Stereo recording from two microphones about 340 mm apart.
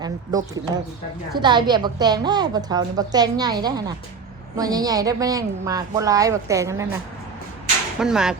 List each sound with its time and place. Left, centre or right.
0.0 s a woman's voice: centre